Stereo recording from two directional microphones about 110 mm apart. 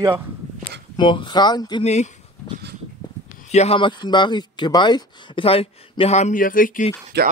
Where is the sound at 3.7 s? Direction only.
45° left (ahead or behind).